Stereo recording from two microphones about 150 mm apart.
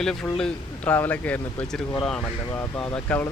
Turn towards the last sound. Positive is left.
turn(degrees=10)  # may be behind; listen again after turning